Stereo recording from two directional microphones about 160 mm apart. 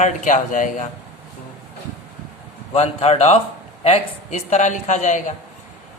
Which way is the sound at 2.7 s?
40° left (ahead or behind).